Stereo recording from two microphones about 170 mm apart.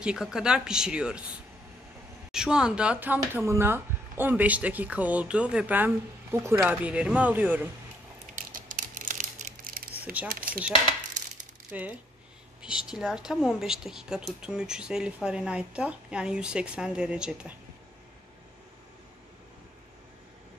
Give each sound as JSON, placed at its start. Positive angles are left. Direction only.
{"t": 0.0, "sound": "a woman's voice", "side_deg": -5}
{"t": 2.3, "sound": "speech", "side_deg": -5}
{"t": 8.4, "sound": "typing", "side_deg": -55}
{"t": 10.3, "sound": "speech", "side_deg": -55}
{"t": 11.7, "sound": "a woman's voice", "side_deg": -10}